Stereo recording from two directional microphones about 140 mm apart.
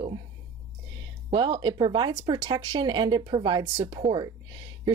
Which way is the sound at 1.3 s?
30° right (ahead or behind).